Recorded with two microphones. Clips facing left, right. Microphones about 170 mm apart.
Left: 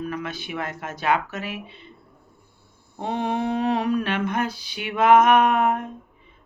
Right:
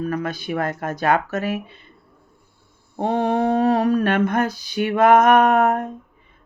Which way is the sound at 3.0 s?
50° right (ahead or behind).